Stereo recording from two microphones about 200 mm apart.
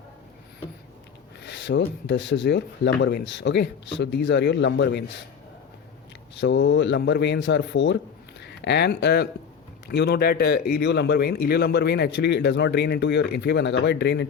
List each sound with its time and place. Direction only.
1.4 s a man's voice: 60° left (ahead or behind)
6.3 s a man's voice: 60° left (ahead or behind)